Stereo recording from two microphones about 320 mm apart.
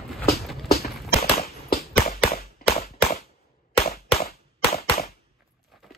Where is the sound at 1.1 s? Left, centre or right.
Left.